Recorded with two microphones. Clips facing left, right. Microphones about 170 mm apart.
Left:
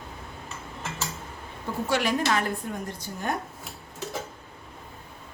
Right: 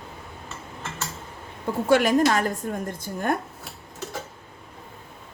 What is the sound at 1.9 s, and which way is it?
A woman's voice, 50° right (ahead or behind).